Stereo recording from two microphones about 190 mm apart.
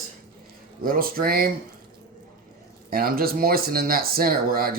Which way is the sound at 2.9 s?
50° right (ahead or behind).